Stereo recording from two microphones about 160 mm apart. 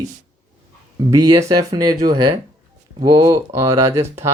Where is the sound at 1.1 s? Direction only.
20° right (ahead or behind).